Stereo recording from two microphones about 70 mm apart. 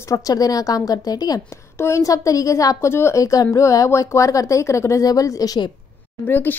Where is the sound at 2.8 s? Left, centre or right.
Left.